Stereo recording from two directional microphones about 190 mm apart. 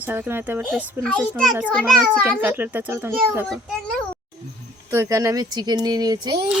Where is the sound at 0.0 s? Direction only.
10° right (ahead or behind).